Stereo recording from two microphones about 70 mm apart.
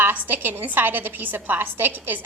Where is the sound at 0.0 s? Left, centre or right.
Right.